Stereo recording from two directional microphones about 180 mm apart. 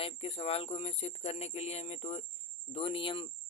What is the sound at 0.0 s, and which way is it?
Speech, 35° left (ahead or behind).